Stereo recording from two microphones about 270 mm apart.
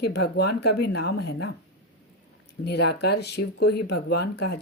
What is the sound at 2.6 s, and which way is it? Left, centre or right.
Speech, left.